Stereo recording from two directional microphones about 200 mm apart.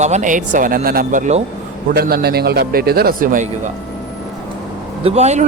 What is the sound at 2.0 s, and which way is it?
Speech, 50° right (ahead or behind).